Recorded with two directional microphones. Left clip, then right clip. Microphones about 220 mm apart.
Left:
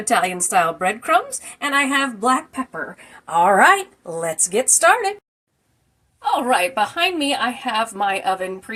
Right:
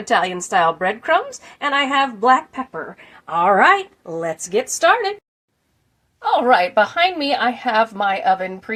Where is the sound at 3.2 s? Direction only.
Centre (ahead or behind).